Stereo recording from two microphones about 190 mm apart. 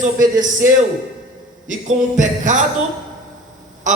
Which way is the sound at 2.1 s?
40° right (ahead or behind).